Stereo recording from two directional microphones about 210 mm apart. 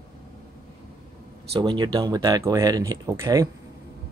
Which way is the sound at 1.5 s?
20° right (ahead or behind).